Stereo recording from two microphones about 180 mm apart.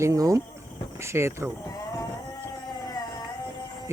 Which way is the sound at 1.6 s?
20° left (ahead or behind).